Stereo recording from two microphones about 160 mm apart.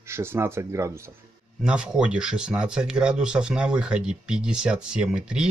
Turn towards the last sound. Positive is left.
turn(degrees=-5)  # may be behind; listen again after turning